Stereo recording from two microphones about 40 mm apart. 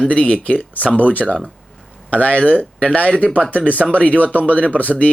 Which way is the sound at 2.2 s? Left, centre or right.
Left.